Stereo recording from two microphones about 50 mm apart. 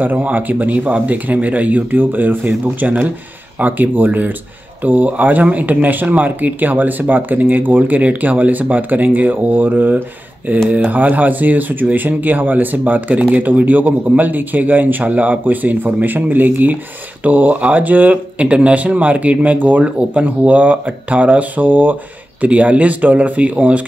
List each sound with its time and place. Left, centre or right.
0.0 s speech: right